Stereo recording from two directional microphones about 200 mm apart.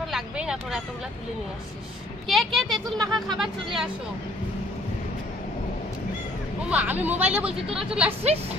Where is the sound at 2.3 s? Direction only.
Centre (ahead or behind).